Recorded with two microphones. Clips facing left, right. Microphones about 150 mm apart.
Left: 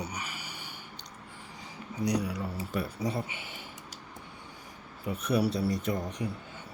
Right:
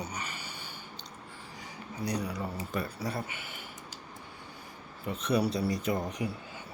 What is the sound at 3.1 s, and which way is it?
Speech, 25° left (ahead or behind).